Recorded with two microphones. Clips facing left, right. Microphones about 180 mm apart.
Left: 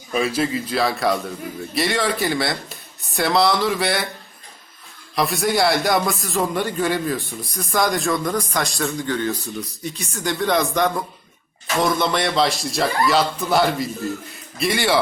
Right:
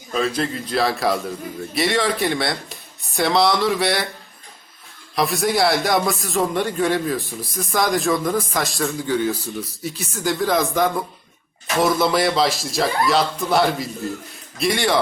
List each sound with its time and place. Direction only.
0.1 s a man's voice: 10° left (ahead or behind)
5.1 s a man's voice: centre (ahead or behind)